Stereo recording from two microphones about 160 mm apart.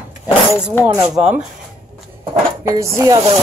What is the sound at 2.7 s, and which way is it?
Speech, 20° right (ahead or behind).